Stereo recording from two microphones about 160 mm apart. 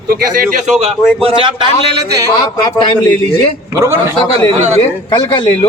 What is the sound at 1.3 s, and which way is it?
Speech, 30° right (ahead or behind).